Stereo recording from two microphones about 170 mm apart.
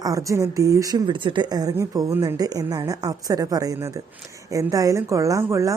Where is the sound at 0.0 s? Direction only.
20° right (ahead or behind).